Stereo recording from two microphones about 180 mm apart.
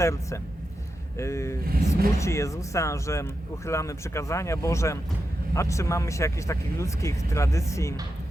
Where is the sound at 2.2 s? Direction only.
15° left (ahead or behind).